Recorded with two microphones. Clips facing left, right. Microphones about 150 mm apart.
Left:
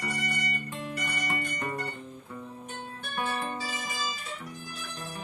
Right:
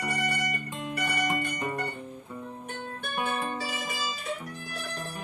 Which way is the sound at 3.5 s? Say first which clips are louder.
Right 2 dB; 60° right (ahead or behind).